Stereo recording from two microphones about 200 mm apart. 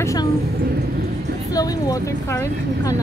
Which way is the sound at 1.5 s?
20° left (ahead or behind).